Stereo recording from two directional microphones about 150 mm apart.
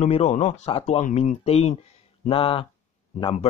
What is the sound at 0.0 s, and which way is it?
Speech, 45° left (ahead or behind).